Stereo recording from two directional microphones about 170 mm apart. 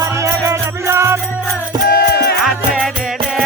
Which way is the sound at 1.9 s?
65° left (ahead or behind).